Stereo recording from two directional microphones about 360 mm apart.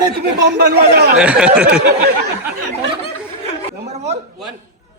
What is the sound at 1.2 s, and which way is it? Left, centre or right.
Speech, centre.